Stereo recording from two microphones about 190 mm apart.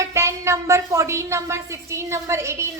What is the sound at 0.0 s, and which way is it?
A woman's voice, 15° right (ahead or behind).